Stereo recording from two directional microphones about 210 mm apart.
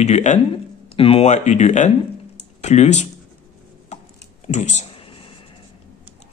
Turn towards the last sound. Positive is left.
turn(degrees=25)  # may be behind; listen again after turning